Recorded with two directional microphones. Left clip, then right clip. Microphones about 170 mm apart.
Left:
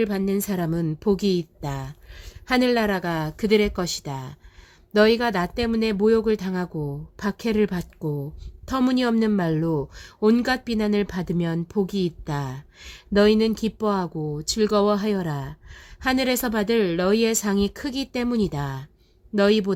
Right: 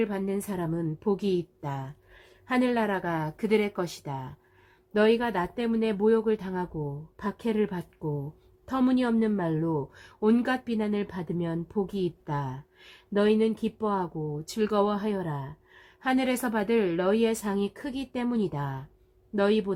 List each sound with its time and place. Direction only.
0.0 s a woman's voice: 30° left (ahead or behind)